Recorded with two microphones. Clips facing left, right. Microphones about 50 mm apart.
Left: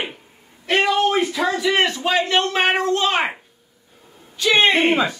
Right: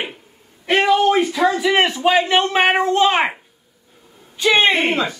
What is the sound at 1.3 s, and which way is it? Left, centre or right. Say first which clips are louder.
Speech: right 3 dB; centre.